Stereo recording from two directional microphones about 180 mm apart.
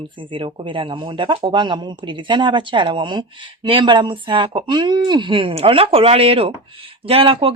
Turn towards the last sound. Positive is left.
turn(degrees=-30)  # may be behind; listen again after turning